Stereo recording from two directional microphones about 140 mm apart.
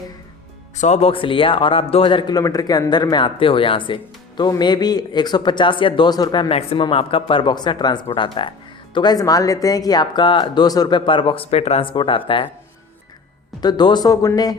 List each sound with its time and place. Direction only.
0.8 s speech: 55° left (ahead or behind); by 6.5 s 30° left (ahead or behind)
6.5 s speech: 45° left (ahead or behind)
13.6 s speech: 30° left (ahead or behind)